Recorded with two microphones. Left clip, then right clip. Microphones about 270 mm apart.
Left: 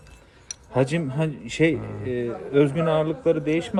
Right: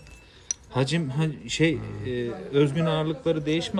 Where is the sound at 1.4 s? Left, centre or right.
Centre.